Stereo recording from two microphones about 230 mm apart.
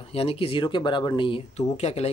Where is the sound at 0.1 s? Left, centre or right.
Left.